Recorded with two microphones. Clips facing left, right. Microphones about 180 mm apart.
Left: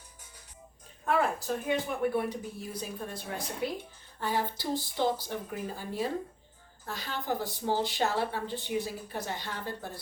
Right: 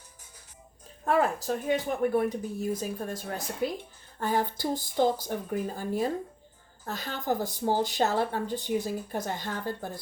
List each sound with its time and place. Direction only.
1.0 s speech: 40° right (ahead or behind)